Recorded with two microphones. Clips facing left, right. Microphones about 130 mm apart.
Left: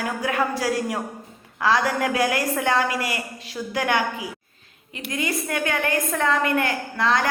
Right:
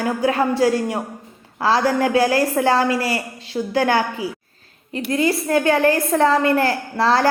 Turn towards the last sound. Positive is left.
turn(degrees=-35)  # may be behind; listen again after turning